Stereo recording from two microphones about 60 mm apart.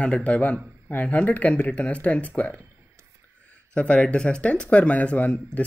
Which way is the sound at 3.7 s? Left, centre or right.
Left.